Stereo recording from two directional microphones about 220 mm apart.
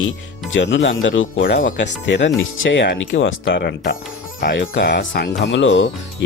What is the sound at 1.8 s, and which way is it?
Speech, 55° left (ahead or behind).